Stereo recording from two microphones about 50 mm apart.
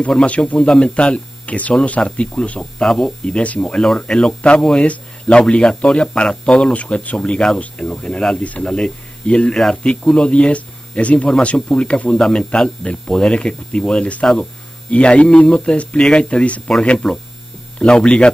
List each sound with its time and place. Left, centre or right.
0.2 s speech: left
2.8 s speech: centre
3.3 s speech: left
4.6 s speech: centre